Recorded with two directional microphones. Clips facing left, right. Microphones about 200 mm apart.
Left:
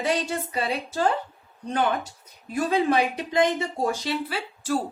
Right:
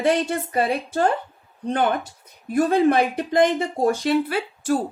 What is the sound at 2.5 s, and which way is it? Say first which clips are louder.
Speech: right 5 dB; 55° right (ahead or behind).